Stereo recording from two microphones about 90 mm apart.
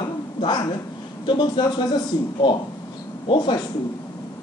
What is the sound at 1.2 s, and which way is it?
Speech, 60° left (ahead or behind).